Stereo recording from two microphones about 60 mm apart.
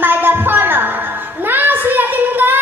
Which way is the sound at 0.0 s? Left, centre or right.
Right.